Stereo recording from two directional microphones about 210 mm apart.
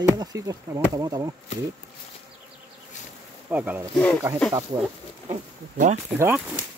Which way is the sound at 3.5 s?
10° right (ahead or behind).